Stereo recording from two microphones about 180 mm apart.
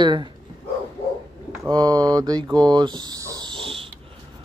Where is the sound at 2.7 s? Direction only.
25° right (ahead or behind).